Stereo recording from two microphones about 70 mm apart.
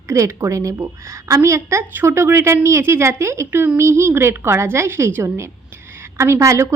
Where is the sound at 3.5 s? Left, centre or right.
Right.